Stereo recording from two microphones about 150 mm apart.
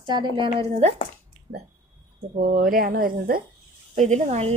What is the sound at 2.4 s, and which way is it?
Speech, 75° right (ahead or behind).